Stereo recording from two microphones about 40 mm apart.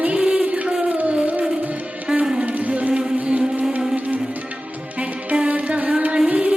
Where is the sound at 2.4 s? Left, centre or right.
Right.